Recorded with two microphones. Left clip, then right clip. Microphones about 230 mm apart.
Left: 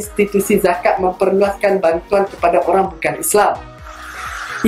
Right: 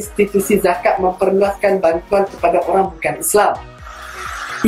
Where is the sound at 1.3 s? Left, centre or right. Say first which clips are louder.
Even; left.